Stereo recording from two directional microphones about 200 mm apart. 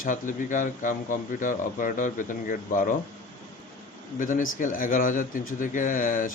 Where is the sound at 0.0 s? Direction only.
40° left (ahead or behind).